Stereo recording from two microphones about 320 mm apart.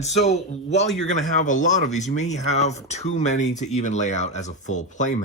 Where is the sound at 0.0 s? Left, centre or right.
Left.